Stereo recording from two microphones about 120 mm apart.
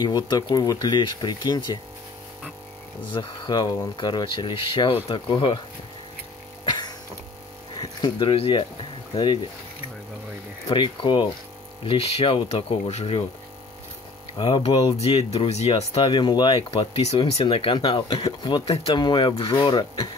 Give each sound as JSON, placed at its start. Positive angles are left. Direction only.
{"t": 0.0, "sound": "speech", "side_deg": 35}
{"t": 3.1, "sound": "speech", "side_deg": 35}
{"t": 6.6, "sound": "a sound", "side_deg": 35}
{"t": 7.8, "sound": "speech", "side_deg": 45}
{"t": 10.7, "sound": "speech", "side_deg": 40}
{"t": 14.3, "sound": "speech", "side_deg": 45}
{"t": 15.0, "sound": "speech", "side_deg": 60}
{"t": 16.1, "sound": "speech", "side_deg": 40}